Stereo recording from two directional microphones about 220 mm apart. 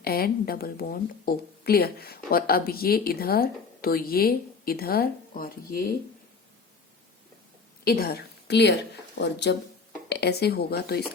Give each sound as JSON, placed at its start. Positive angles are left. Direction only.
{"t": 0.0, "sound": "speech", "side_deg": 45}
{"t": 7.9, "sound": "a woman's voice", "side_deg": 45}